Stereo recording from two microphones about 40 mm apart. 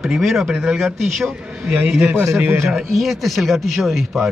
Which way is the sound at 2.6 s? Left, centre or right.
Centre.